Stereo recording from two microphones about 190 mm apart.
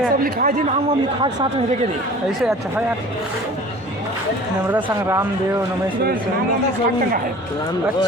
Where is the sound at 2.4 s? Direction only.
5° right (ahead or behind).